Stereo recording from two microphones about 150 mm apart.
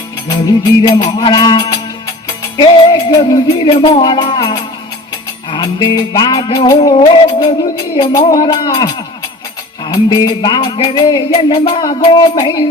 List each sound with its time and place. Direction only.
0.3 s music: 30° left (ahead or behind)
8.1 s music: 25° left (ahead or behind)